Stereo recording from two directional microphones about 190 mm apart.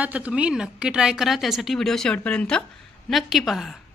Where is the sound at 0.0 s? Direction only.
5° right (ahead or behind).